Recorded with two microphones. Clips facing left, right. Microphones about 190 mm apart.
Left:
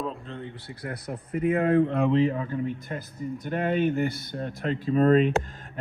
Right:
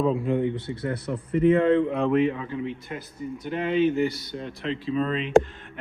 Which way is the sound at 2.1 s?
40° left (ahead or behind).